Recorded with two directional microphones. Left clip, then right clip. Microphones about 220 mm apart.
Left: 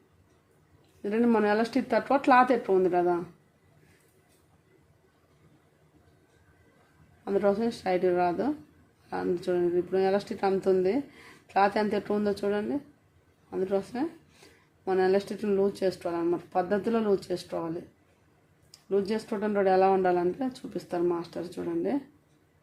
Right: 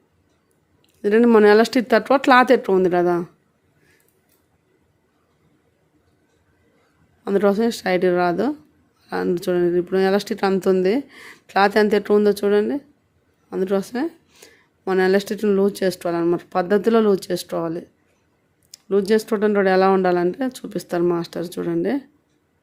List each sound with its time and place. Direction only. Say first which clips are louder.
1.0 s speech: right 12 dB; 35° right (ahead or behind)
7.3 s speech: right 8 dB; 35° right (ahead or behind)
18.7 s speech: right 10 dB; 35° right (ahead or behind)